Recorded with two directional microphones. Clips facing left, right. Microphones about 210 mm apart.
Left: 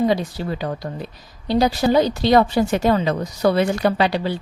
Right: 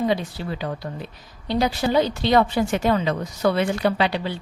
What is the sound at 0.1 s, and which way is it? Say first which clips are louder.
A woman's voice: left 3 dB; 40° left (ahead or behind).